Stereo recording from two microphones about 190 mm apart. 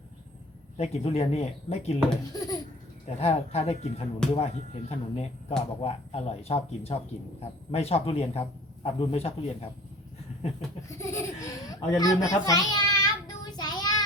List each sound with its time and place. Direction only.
0.8 s speech: 35° left (ahead or behind)
2.3 s baby laughter: 20° left (ahead or behind)
3.2 s speech: 35° left (ahead or behind)
10.8 s children playing: 15° left (ahead or behind)